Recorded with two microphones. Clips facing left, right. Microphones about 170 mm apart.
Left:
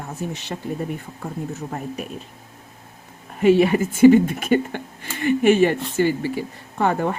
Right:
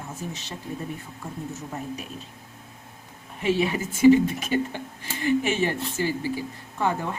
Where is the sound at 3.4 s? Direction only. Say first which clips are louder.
Left 9 dB; 55° left (ahead or behind).